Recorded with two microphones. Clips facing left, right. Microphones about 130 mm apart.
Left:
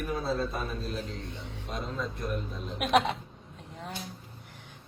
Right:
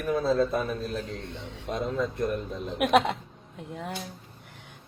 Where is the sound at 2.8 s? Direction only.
60° right (ahead or behind).